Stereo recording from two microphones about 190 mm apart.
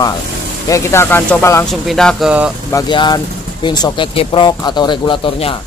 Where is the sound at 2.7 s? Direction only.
20° left (ahead or behind).